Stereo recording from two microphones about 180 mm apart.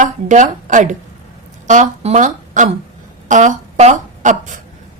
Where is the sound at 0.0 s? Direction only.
45° right (ahead or behind).